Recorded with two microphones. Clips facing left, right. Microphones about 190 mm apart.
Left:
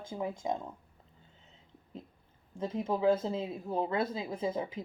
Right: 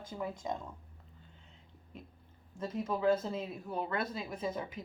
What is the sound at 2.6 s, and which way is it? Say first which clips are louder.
Speech: left 3 dB; 25° left (ahead or behind).